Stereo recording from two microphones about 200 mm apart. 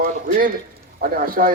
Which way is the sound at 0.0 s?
45° right (ahead or behind).